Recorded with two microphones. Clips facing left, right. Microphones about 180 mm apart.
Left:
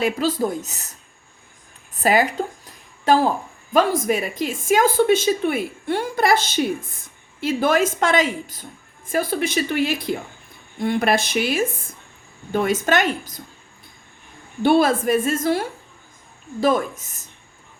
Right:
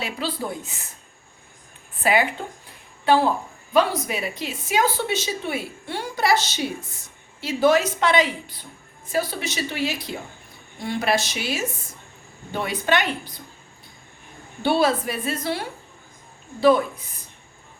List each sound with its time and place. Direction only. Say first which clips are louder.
0.0 s a woman's voice: left 8 dB; 45° left (ahead or behind)
2.0 s a woman's voice: left 3 dB; 40° left (ahead or behind)
14.6 s a woman's voice: left 4 dB; 50° left (ahead or behind)